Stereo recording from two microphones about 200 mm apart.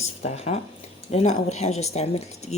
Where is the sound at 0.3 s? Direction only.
35° left (ahead or behind).